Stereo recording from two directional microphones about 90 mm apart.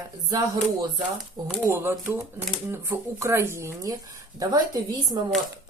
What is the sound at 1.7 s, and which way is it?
Speech, 25° right (ahead or behind).